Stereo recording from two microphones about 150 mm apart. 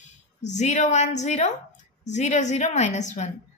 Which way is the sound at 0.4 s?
50° left (ahead or behind).